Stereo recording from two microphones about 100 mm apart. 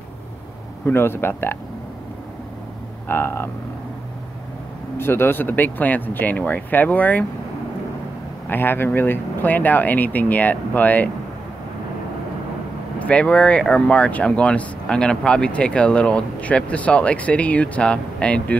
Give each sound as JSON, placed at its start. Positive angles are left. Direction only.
{"t": 0.8, "sound": "speech", "side_deg": 25}
{"t": 3.1, "sound": "speech", "side_deg": 20}
{"t": 4.9, "sound": "speech", "side_deg": 25}
{"t": 8.5, "sound": "speech", "side_deg": 20}
{"t": 13.0, "sound": "speech", "side_deg": 10}